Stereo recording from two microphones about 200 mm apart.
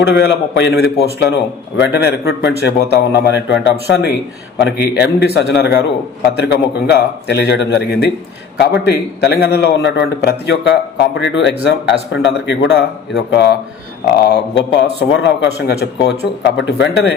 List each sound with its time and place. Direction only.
0.0 s a man's voice: 60° left (ahead or behind)